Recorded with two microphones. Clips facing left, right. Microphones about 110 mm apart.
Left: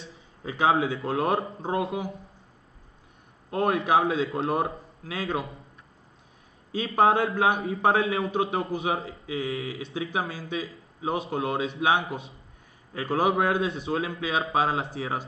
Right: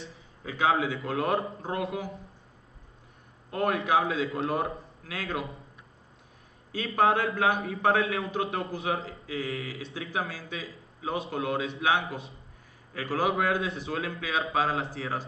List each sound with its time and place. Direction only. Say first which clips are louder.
0.5 s speech: left 3 dB; 30° left (ahead or behind)
3.5 s speech: left 3 dB; 30° left (ahead or behind)
7.0 s speech: left 3 dB; 30° left (ahead or behind)